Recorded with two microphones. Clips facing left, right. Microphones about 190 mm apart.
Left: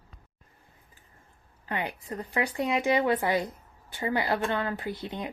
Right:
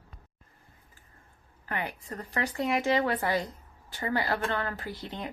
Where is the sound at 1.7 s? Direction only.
15° left (ahead or behind).